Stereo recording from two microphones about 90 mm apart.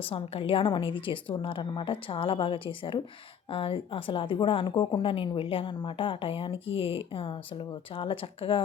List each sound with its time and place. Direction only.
0.1 s a woman's voice: 85° left; by 3.0 s 70° left (ahead or behind)
3.5 s a woman's voice: 90° left
4.6 s a woman's voice: 50° left (ahead or behind)
5.0 s a woman's voice: 70° left (ahead or behind)